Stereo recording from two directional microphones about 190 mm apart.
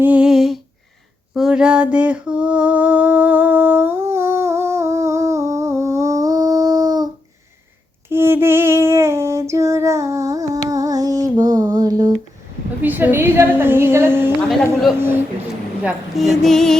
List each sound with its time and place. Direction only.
0.0 s humming: 5° right (ahead or behind)
1.4 s a sound: 5° right (ahead or behind); by 7.1 s 20° right (ahead or behind)
8.1 s female singing: 10° right (ahead or behind)
10.7 s a sound: 20° right (ahead or behind)
12.8 s a woman's voice: 10° right (ahead or behind)
14.5 s music: centre (ahead or behind)
14.9 s a woman's voice: 10° right (ahead or behind)
15.8 s music: 5° right (ahead or behind)